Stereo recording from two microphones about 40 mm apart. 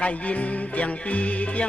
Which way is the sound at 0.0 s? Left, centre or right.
Left.